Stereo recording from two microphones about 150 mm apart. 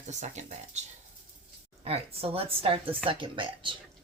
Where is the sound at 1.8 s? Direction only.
40° right (ahead or behind).